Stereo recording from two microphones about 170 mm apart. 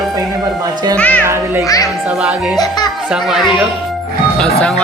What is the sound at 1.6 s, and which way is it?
Speech, 20° left (ahead or behind).